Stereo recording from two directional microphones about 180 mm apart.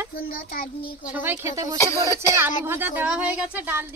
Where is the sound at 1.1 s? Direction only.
10° right (ahead or behind).